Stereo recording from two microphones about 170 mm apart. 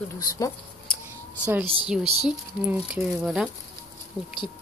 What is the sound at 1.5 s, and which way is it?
Speech, 10° right (ahead or behind).